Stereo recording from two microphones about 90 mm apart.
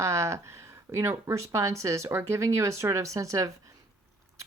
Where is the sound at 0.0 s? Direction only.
30° right (ahead or behind).